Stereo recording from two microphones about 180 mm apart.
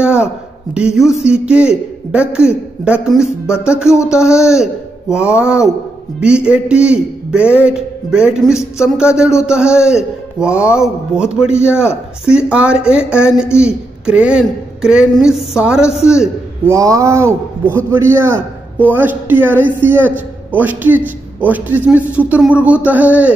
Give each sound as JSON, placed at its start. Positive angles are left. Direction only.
{"t": 0.0, "sound": "a sound", "side_deg": -5}
{"t": 0.7, "sound": "a man's voice", "side_deg": -5}
{"t": 3.9, "sound": "speech", "side_deg": 15}
{"t": 4.4, "sound": "a man's voice", "side_deg": -5}
{"t": 16.6, "sound": "a man's voice", "side_deg": -20}